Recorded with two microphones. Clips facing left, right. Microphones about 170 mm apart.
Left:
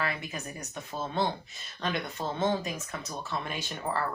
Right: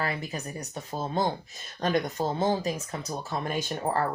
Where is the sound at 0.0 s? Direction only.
35° right (ahead or behind).